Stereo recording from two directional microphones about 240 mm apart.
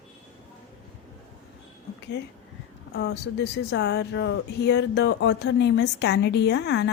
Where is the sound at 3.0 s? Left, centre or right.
Left.